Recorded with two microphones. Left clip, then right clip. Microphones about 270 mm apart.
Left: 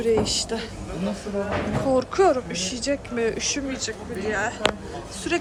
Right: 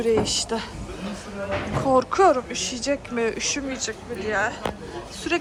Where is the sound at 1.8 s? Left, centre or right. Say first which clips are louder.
Right 2 dB; centre.